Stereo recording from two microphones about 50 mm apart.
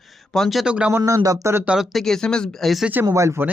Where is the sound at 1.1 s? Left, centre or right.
Right.